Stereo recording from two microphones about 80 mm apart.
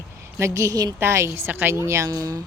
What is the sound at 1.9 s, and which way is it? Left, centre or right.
Speech, right.